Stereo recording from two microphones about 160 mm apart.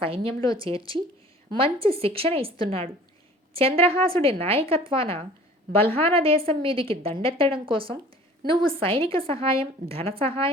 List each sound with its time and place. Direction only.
0.0 s a woman's voice: 35° right (ahead or behind)